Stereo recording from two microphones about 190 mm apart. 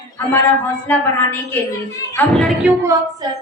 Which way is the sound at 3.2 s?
20° right (ahead or behind).